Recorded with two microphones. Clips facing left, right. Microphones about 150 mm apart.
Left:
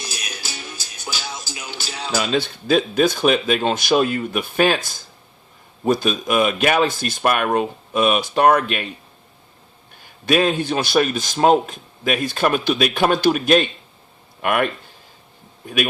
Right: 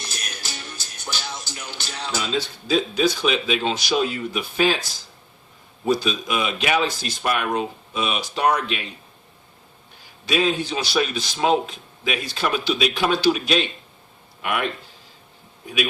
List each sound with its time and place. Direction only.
0.0 s music: 5° left (ahead or behind)
2.1 s a man's voice: 65° left (ahead or behind)
10.2 s a man's voice: 55° left (ahead or behind)